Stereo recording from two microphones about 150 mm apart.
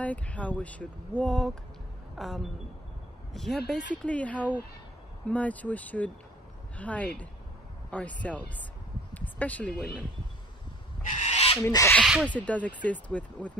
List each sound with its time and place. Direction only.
0.0 s speech: 10° left (ahead or behind)
9.1 s a sound: 10° left (ahead or behind)
11.1 s owl: 50° left (ahead or behind)
11.6 s speech: 20° left (ahead or behind)